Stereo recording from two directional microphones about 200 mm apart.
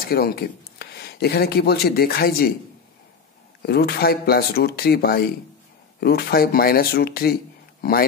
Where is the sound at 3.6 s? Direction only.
50° left (ahead or behind).